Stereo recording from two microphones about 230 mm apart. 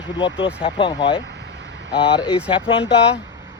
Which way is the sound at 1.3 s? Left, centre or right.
Right.